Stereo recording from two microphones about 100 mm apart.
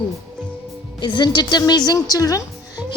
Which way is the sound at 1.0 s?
50° left (ahead or behind).